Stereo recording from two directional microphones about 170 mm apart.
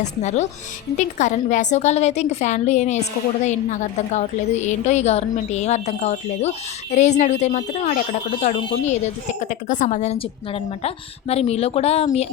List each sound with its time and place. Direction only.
0.0 s a woman's voice: 40° left (ahead or behind)